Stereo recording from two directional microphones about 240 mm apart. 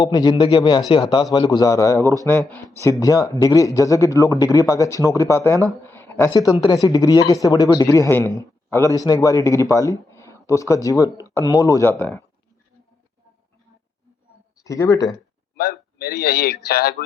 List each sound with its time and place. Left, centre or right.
0.0 s speech: centre
14.6 s speech: centre
15.5 s a man's voice: left